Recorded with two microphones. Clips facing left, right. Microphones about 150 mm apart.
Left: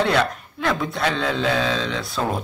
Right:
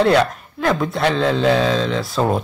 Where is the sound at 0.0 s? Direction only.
Centre (ahead or behind).